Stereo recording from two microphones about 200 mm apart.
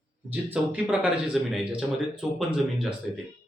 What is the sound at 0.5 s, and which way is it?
A man's voice, 5° right (ahead or behind).